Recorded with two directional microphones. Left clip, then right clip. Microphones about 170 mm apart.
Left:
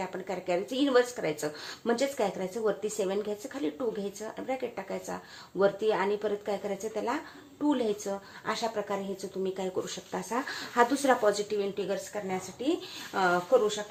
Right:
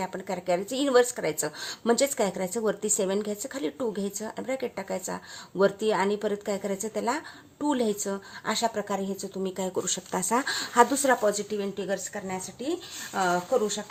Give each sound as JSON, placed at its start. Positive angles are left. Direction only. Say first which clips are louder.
{"t": 0.0, "sound": "a woman's voice", "louder": "right 3 dB", "side_deg": -40}